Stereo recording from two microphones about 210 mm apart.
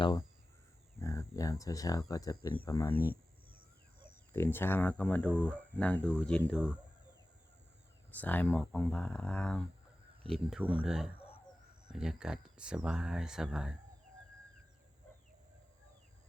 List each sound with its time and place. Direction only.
0.0 s speech: 20° left (ahead or behind)
4.3 s speech: 10° left (ahead or behind)
8.1 s speech: 10° left (ahead or behind)